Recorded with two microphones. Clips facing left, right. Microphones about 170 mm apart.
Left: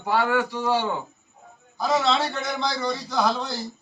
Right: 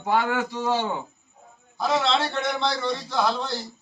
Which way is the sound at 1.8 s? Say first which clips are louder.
Left 1 dB; centre (ahead or behind).